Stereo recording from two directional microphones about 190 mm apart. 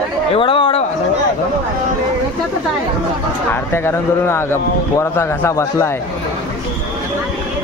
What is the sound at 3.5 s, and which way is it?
Speech, 10° left (ahead or behind).